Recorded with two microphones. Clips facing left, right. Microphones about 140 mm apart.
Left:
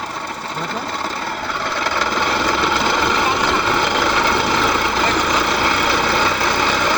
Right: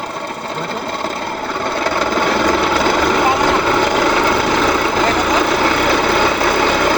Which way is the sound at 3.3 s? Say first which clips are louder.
Right 4 dB; 50° right (ahead or behind).